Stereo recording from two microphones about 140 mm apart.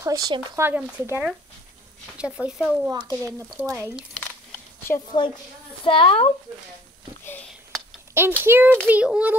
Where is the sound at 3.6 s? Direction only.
20° right (ahead or behind).